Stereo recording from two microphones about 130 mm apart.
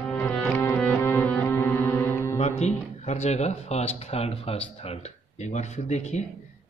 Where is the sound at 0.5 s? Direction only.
15° left (ahead or behind).